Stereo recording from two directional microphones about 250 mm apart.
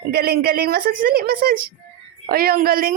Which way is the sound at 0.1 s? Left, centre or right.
Right.